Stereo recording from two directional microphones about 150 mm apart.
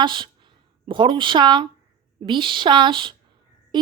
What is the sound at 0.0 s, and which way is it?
A woman's voice, 30° right (ahead or behind).